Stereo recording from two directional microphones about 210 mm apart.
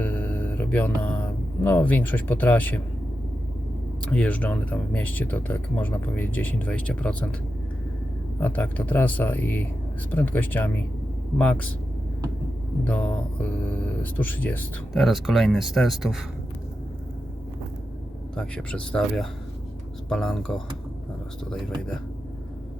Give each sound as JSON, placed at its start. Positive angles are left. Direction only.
{"t": 0.0, "sound": "music", "side_deg": 10}
{"t": 1.6, "sound": "speech", "side_deg": 10}
{"t": 4.0, "sound": "speech", "side_deg": 5}
{"t": 8.4, "sound": "speech", "side_deg": 10}
{"t": 12.8, "sound": "speech", "side_deg": 5}
{"t": 18.3, "sound": "speech", "side_deg": 5}